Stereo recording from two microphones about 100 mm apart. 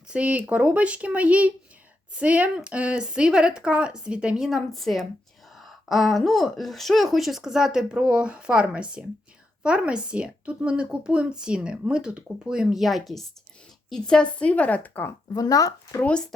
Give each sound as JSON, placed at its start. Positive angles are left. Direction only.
{"t": 0.1, "sound": "speech", "side_deg": -15}
{"t": 4.4, "sound": "a woman's voice", "side_deg": 0}
{"t": 15.3, "sound": "speech", "side_deg": 35}
{"t": 16.0, "sound": "a woman's voice", "side_deg": 10}